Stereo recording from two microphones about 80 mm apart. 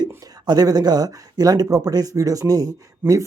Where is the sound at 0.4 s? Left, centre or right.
Right.